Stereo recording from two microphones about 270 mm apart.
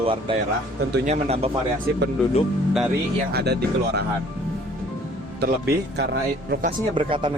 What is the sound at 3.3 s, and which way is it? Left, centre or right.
Speech, right.